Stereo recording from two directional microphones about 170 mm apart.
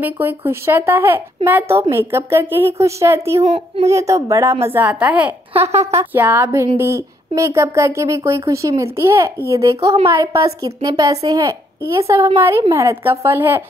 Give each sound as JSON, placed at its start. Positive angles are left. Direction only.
{"t": 0.0, "sound": "speech", "side_deg": -10}
{"t": 3.4, "sound": "a child's voice", "side_deg": -35}
{"t": 3.8, "sound": "speech", "side_deg": -20}
{"t": 5.5, "sound": "a child's voice", "side_deg": -40}
{"t": 5.9, "sound": "a woman's voice", "side_deg": -15}